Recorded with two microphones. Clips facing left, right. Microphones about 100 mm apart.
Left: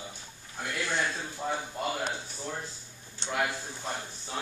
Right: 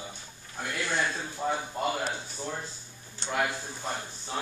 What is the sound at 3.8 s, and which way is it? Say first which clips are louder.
Speech: right 2 dB; 10° right (ahead or behind).